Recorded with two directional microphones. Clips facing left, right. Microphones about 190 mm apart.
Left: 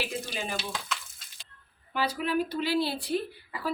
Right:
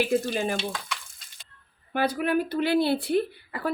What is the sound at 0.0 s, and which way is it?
Speech, 50° right (ahead or behind).